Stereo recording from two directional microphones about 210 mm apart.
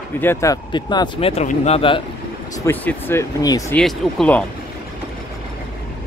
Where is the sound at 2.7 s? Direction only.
10° left (ahead or behind).